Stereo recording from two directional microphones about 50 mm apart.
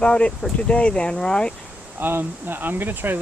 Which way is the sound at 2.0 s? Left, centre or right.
Right.